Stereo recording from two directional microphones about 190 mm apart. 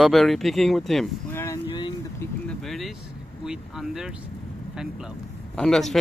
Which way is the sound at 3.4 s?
5° right (ahead or behind).